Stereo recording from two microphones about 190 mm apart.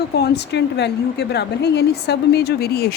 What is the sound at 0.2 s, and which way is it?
A woman's voice, 65° left (ahead or behind).